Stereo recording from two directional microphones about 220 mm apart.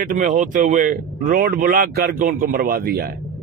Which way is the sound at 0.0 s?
40° right (ahead or behind).